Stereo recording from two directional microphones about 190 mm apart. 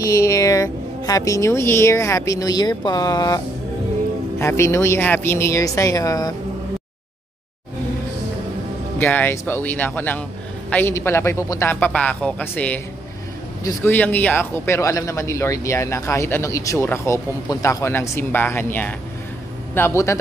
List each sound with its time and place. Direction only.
0.0 s a man's voice: 15° left (ahead or behind)
8.9 s a man's voice: 10° left (ahead or behind)